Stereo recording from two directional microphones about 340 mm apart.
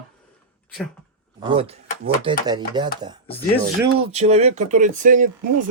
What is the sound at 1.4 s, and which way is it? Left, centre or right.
Speech, centre.